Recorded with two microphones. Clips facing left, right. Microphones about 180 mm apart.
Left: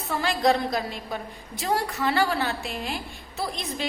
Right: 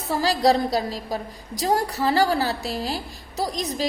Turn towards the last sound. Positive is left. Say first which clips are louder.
# right 4 dB
turn(degrees=-40)  # may be behind; listen again after turning